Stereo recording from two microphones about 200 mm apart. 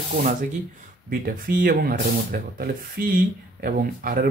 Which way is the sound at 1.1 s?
45° right (ahead or behind).